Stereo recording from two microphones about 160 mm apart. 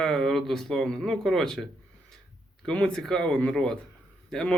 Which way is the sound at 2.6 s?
5° left (ahead or behind).